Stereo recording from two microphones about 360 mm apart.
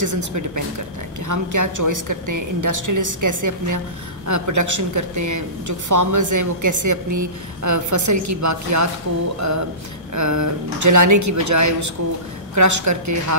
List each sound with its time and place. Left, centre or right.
0.0 s a woman's voice: right